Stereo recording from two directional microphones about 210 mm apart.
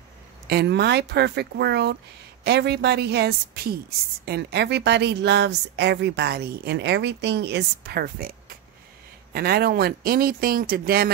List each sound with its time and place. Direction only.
0.5 s a woman's voice: 50° right (ahead or behind)